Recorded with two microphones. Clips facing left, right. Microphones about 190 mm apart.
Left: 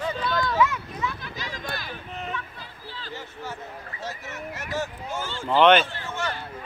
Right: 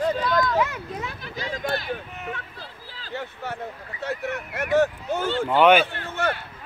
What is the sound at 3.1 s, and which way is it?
Speech, 60° right (ahead or behind).